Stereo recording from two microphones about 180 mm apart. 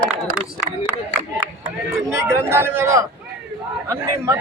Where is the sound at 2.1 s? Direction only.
15° right (ahead or behind).